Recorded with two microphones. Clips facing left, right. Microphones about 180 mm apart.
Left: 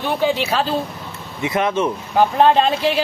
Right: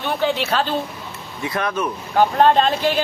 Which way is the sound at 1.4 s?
20° left (ahead or behind).